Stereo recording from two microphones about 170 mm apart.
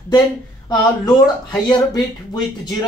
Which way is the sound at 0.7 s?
25° left (ahead or behind).